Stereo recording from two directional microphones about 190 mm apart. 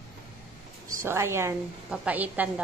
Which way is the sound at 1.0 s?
15° right (ahead or behind).